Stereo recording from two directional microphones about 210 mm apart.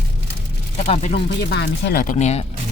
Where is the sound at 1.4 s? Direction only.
50° left (ahead or behind).